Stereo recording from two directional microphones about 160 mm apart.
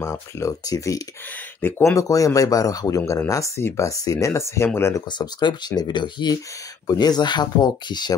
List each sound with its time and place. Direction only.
0.0 s speech: 20° left (ahead or behind)
5.1 s speech: 30° left (ahead or behind)